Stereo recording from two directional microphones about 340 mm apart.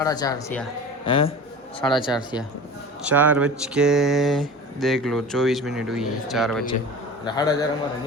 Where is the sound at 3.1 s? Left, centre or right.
Centre.